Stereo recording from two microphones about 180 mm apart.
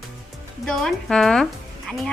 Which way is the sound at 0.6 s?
5° left (ahead or behind).